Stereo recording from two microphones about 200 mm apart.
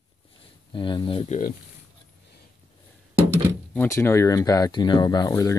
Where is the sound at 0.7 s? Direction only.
25° left (ahead or behind).